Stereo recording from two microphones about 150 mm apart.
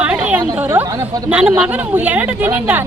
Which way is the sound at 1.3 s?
10° right (ahead or behind).